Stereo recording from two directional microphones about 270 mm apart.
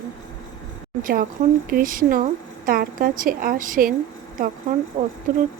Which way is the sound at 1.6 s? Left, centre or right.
Right.